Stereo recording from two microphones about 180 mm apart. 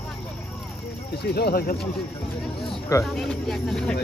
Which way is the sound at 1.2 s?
65° left (ahead or behind).